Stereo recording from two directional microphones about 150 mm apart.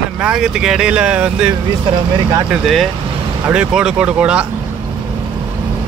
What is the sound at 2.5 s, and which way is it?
Speech, centre (ahead or behind).